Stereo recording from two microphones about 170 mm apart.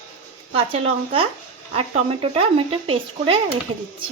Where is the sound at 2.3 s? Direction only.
35° right (ahead or behind).